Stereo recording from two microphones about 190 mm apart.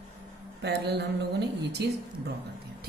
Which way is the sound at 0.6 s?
60° right (ahead or behind).